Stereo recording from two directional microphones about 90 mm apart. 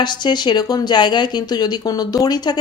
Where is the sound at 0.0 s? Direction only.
55° left (ahead or behind).